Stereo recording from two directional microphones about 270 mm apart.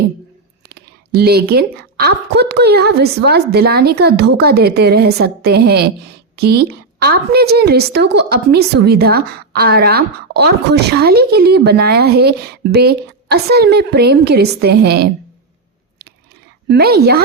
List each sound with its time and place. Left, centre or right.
0.7 s a woman's voice: right
16.6 s a woman's voice: right